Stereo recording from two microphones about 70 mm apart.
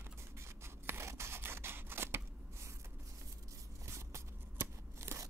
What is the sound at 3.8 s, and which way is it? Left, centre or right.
Shuffling cards, right.